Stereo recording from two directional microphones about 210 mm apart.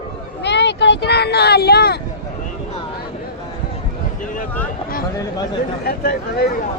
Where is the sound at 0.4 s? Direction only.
55° left (ahead or behind).